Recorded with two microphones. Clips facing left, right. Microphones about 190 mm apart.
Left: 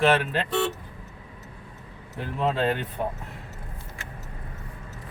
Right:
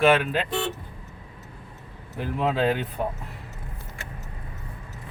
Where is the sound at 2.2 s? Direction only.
5° right (ahead or behind).